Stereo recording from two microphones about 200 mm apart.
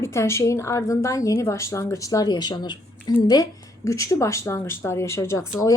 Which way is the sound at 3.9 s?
15° left (ahead or behind).